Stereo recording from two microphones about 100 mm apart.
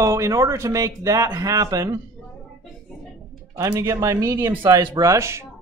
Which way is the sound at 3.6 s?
35° right (ahead or behind).